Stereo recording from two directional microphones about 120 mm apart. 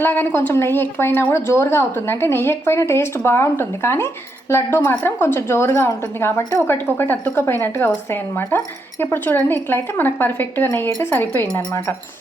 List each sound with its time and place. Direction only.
0.0 s a woman's voice: 15° left (ahead or behind)